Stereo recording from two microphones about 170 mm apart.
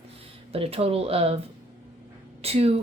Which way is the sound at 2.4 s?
35° right (ahead or behind).